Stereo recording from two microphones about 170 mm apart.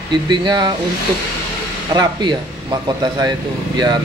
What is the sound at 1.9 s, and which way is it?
A man's voice, 25° right (ahead or behind).